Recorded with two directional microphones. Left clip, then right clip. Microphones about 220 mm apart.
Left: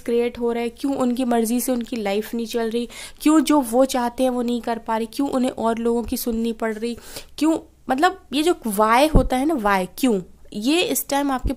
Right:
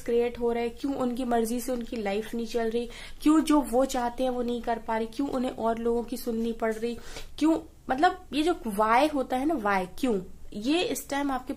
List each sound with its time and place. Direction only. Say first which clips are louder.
0.0 s speech: left 5 dB; 50° left (ahead or behind)